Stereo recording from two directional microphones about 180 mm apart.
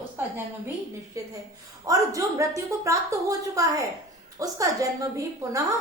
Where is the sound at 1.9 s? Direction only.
20° right (ahead or behind).